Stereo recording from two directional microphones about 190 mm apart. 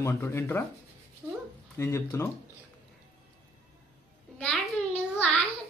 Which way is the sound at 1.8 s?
15° left (ahead or behind).